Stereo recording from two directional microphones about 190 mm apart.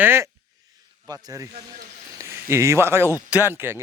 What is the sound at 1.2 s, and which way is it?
Speech, 15° right (ahead or behind).